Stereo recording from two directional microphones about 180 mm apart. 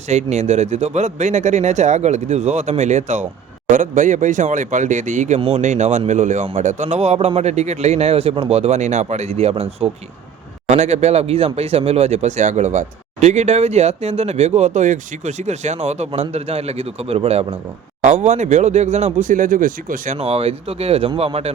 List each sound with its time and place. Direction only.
0.1 s speech: 40° right (ahead or behind)
20.1 s speech: 35° right (ahead or behind)